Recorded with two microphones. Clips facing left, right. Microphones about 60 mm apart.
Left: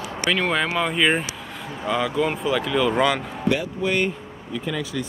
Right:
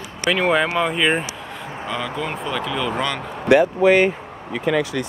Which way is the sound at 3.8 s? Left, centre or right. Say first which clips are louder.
Right 8 dB; right.